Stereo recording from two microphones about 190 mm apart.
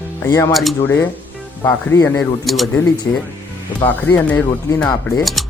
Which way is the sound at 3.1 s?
10° left (ahead or behind).